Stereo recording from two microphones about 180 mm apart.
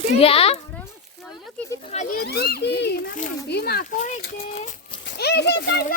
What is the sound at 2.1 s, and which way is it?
A child's voice, 65° left (ahead or behind).